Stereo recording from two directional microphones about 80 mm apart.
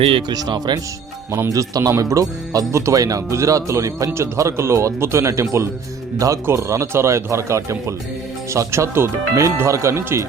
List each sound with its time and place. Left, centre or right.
0.3 s speech: right
1.3 s speech: right